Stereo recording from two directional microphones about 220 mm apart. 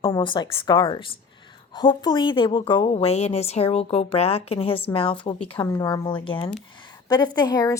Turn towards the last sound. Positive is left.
turn(degrees=15)  # may be behind; listen again after turning